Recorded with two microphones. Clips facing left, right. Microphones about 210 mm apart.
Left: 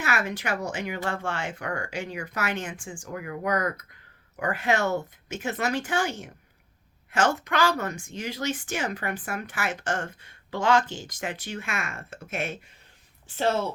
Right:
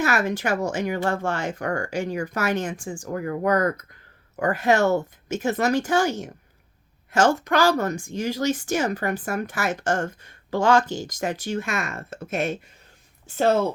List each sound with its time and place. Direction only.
0.0 s speech: 40° right (ahead or behind)